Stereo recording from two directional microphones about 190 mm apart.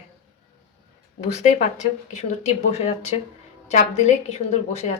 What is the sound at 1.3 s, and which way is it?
A woman's voice, 40° left (ahead or behind).